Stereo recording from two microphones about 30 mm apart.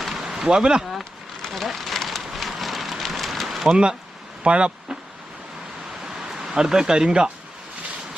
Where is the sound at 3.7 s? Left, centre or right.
Right.